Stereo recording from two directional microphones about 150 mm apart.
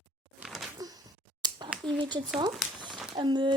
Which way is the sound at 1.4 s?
30° right (ahead or behind).